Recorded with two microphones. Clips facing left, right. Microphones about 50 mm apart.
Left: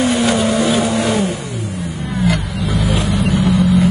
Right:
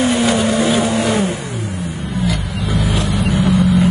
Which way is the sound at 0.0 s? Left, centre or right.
Centre.